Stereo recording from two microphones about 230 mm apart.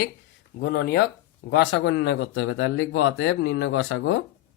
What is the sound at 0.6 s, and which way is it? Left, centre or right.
Speech, left.